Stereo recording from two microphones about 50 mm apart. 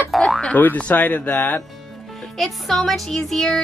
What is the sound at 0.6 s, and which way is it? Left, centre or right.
Speech, left.